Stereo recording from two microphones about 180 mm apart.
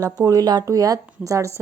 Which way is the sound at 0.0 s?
20° right (ahead or behind).